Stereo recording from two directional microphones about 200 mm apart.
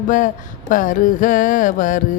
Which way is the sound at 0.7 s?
40° left (ahead or behind).